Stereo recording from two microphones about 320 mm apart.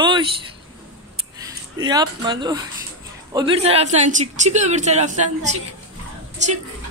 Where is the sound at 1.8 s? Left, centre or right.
Centre.